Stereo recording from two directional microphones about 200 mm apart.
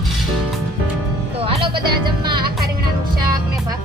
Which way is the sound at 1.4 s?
25° right (ahead or behind).